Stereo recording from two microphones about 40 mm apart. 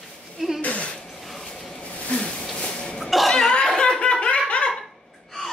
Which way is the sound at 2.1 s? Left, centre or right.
Left.